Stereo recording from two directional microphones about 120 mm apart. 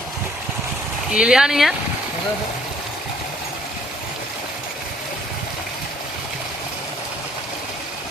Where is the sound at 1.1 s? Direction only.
5° right (ahead or behind).